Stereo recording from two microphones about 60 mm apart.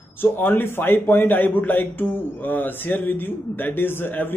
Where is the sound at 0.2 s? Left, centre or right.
Left.